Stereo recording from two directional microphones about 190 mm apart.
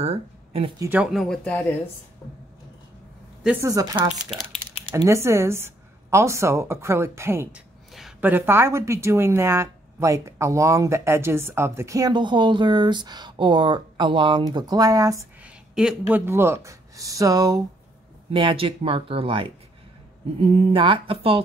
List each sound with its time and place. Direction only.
0.0 s speech: 30° right (ahead or behind)
0.7 s speech: 10° right (ahead or behind)
2.2 s a sound: 15° left (ahead or behind)
3.4 s speech: 15° right (ahead or behind)
15.4 s speech: 5° right (ahead or behind); by 21.4 s 30° right (ahead or behind)